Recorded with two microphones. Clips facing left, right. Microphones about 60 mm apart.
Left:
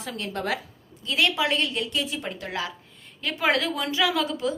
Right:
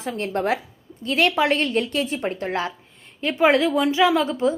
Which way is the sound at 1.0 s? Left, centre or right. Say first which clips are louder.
Right 5 dB; right.